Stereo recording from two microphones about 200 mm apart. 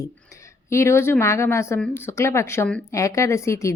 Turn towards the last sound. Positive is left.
turn(degrees=15)  # may be behind; listen again after turning